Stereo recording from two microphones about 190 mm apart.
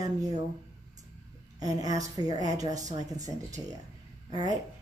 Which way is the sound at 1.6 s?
20° right (ahead or behind).